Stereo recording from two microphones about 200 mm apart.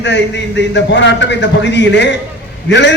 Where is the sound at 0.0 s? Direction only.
60° left (ahead or behind).